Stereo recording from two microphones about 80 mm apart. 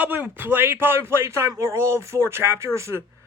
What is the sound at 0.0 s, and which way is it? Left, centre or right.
Speech, right.